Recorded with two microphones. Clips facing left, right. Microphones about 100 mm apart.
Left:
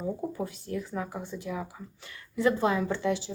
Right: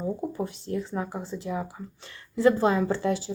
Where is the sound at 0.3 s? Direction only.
25° right (ahead or behind).